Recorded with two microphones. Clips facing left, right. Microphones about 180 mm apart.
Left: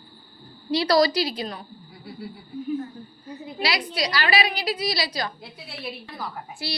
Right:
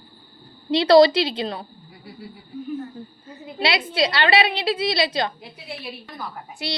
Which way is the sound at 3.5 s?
25° right (ahead or behind).